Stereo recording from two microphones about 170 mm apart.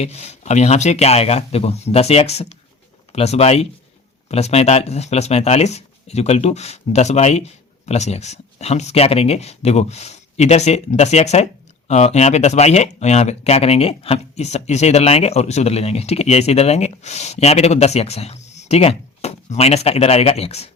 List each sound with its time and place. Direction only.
0.0 s speech: 40° left (ahead or behind)